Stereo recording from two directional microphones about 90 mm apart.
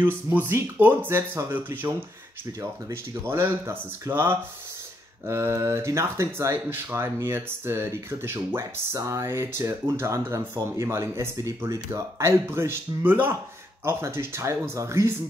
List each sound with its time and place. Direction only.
0.3 s speech: 25° right (ahead or behind)
3.3 s speech: 30° right (ahead or behind)